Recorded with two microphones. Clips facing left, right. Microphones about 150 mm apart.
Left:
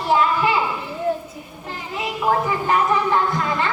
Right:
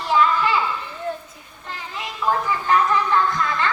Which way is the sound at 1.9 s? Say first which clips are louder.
Left 3 dB; 15° left (ahead or behind).